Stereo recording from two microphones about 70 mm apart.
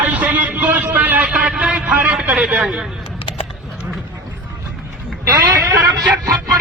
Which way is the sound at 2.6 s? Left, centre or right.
Centre.